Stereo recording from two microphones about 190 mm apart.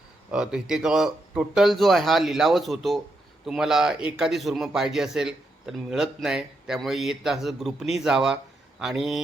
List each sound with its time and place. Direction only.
0.3 s a man's voice: 5° right (ahead or behind)